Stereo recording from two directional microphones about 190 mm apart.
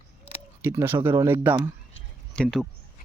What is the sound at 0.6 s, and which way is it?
Speech, 15° right (ahead or behind).